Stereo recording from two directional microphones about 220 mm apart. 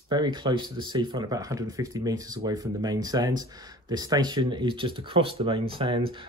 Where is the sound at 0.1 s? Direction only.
20° right (ahead or behind).